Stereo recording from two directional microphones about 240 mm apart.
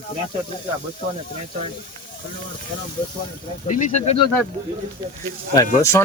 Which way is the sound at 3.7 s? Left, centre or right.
Left.